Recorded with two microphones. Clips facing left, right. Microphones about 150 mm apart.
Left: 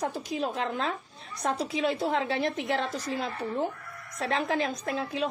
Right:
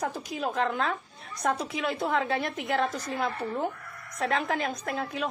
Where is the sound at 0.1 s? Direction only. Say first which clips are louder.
Left 1 dB; 30° left (ahead or behind).